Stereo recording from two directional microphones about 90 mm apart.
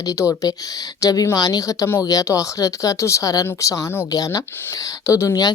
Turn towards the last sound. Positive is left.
turn(degrees=40)  # may be behind; listen again after turning